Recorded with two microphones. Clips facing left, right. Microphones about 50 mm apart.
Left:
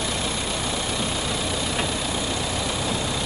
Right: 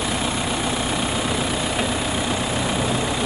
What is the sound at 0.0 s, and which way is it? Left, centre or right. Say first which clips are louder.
Vehicle: right 3 dB; right.